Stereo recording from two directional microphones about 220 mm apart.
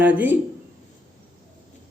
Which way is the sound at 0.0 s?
10° right (ahead or behind).